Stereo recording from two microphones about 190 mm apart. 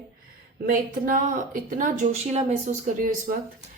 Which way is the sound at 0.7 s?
45° right (ahead or behind).